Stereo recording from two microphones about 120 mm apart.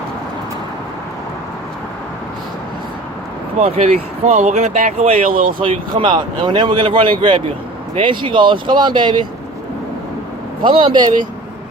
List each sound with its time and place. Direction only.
3.6 s speech: 70° right (ahead or behind)
5.3 s speech: 50° right (ahead or behind)
10.6 s speech: 45° right (ahead or behind)